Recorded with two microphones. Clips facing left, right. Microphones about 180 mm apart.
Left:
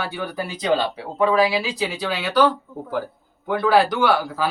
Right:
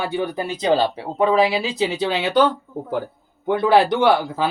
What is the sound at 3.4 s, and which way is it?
Speech, 25° right (ahead or behind).